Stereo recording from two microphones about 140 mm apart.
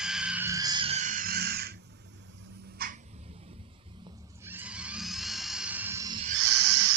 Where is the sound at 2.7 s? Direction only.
90° right.